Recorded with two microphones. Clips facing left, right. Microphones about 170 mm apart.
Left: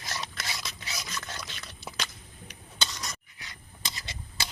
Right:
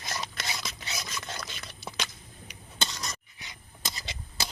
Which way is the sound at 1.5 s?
5° right (ahead or behind).